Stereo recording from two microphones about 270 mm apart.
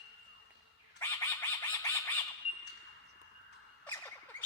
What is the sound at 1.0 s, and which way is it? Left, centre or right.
Frog, centre.